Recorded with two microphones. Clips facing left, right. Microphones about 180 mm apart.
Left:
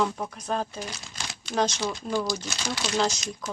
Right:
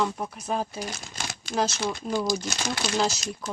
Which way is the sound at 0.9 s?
50° right (ahead or behind).